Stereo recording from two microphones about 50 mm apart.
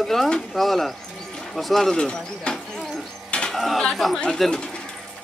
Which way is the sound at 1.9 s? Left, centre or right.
Centre.